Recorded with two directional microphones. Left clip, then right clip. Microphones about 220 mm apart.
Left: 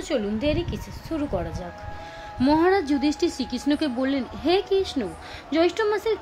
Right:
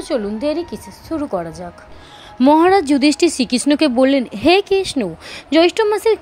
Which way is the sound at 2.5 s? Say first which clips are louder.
Right 7 dB; 35° right (ahead or behind).